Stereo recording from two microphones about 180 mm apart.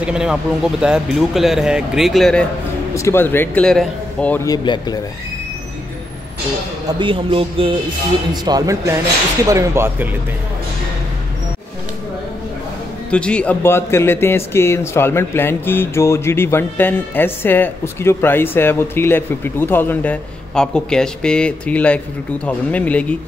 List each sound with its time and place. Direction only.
0.0 s speech: 5° right (ahead or behind)
2.9 s speech: 15° left (ahead or behind)
4.5 s speech: 20° left (ahead or behind)
6.9 s speech: 30° right (ahead or behind)
13.1 s speech: 5° left (ahead or behind)